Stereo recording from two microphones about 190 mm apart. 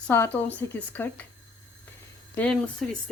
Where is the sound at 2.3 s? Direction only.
10° left (ahead or behind).